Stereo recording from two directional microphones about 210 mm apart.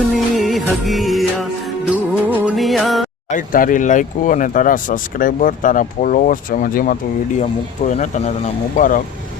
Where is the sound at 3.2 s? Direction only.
40° left (ahead or behind).